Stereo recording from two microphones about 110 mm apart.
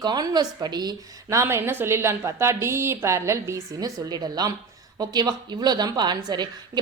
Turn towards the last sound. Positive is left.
turn(degrees=-40)  # may be behind; listen again after turning